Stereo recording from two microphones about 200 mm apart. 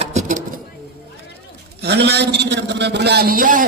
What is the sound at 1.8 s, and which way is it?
A man's voice, 55° right (ahead or behind).